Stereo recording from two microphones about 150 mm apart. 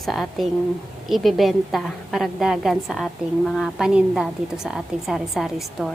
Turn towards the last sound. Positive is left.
turn(degrees=0)  # may be behind; listen again after turning